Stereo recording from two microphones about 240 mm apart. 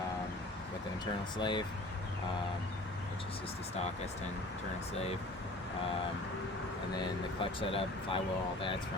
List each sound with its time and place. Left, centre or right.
1.4 s speech: centre
7.6 s speech: left